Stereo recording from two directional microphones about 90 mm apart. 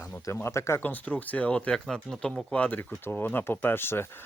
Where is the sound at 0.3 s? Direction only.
30° left (ahead or behind).